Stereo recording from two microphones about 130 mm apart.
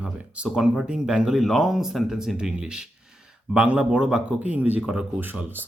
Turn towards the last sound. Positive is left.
turn(degrees=-15)  # may be behind; listen again after turning